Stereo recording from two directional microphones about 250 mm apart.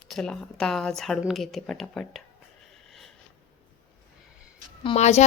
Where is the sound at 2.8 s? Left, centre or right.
Centre.